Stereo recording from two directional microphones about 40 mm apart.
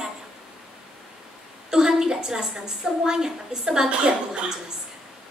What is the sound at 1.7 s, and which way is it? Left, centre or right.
A woman's voice, centre.